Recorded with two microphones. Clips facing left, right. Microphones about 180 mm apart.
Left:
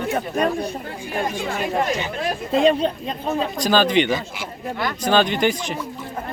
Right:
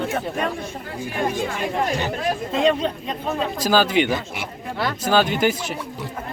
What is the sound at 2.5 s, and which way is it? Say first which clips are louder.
Speech: left 3 dB; 35° left (ahead or behind).